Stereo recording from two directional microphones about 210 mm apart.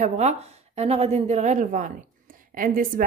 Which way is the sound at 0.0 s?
30° right (ahead or behind).